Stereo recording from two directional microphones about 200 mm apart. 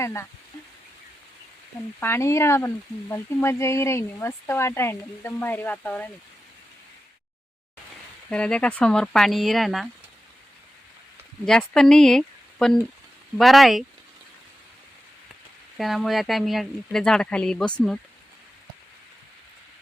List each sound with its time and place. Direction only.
0.0 s speech: 15° left (ahead or behind)
2.0 s speech: 10° left (ahead or behind)
8.3 s speech: 5° left (ahead or behind)
11.4 s speech: 5° left (ahead or behind)
15.8 s speech: centre (ahead or behind)